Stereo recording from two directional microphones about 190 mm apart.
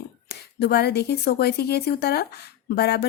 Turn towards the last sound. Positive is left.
turn(degrees=55)  # may be behind; listen again after turning